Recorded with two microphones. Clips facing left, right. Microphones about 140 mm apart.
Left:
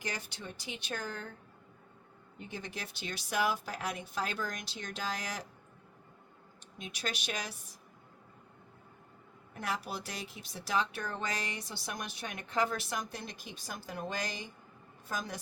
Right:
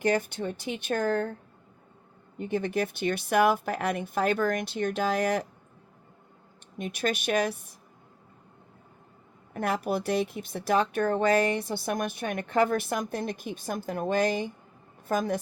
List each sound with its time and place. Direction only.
0.0 s speech: 55° right (ahead or behind)
2.4 s speech: 55° right (ahead or behind)
6.7 s a woman's voice: 55° right (ahead or behind)
9.5 s a woman's voice: 55° right (ahead or behind)